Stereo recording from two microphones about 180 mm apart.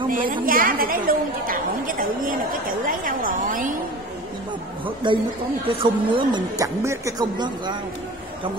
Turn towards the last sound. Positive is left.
turn(degrees=-25)  # may be behind; listen again after turning